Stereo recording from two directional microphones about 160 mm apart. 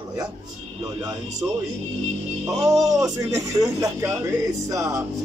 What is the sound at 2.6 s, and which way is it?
A man's voice, 20° right (ahead or behind).